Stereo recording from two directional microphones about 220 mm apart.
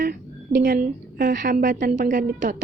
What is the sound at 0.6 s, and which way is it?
A woman's voice, 40° right (ahead or behind).